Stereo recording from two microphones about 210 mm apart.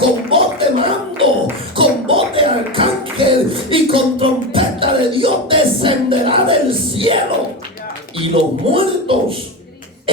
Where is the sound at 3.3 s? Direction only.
25° right (ahead or behind).